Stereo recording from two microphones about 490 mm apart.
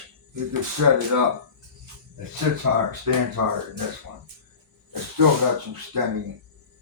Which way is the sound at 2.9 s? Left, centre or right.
Right.